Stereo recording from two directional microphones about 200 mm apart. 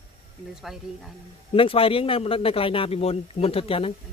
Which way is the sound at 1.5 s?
25° left (ahead or behind).